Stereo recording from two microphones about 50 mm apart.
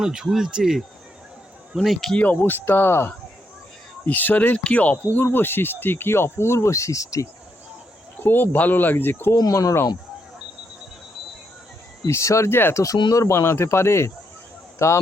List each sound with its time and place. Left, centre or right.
0.0 s speech: centre
2.1 s speech: left
4.0 s speech: left
5.1 s speech: left
8.2 s speech: left
9.3 s speech: left
12.0 s speech: left
12.5 s speech: left
12.7 s speech: left
14.8 s speech: left